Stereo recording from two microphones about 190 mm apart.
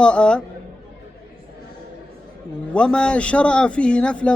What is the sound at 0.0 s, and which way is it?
Speech, 5° left (ahead or behind).